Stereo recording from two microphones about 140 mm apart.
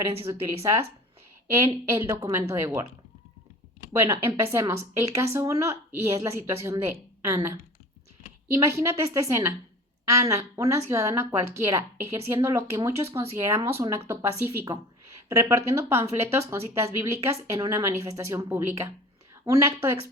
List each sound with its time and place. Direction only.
0.3 s a woman's voice: 20° right (ahead or behind)
3.9 s a woman's voice: 20° right (ahead or behind)